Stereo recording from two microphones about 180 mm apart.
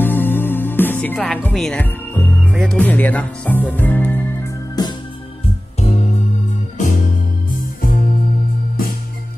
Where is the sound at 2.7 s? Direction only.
10° left (ahead or behind).